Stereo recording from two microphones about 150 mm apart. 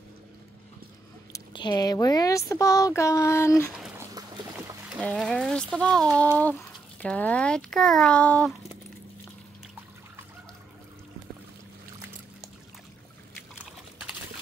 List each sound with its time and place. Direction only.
1.5 s speech: 30° left (ahead or behind)
4.6 s a child's voice: centre (ahead or behind)